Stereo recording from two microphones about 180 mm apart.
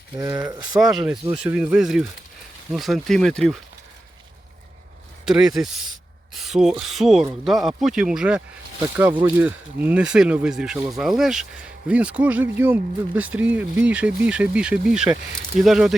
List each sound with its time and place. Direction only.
0.2 s speech: 15° right (ahead or behind)
0.8 s speech: 5° right (ahead or behind)
5.2 s speech: centre (ahead or behind)